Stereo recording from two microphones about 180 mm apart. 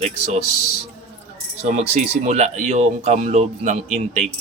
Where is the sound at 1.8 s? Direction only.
40° right (ahead or behind).